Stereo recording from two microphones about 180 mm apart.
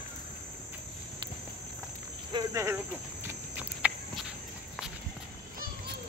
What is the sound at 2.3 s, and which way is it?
Cricket, 20° right (ahead or behind).